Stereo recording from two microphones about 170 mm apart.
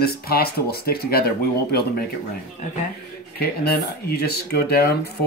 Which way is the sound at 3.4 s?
65° left (ahead or behind).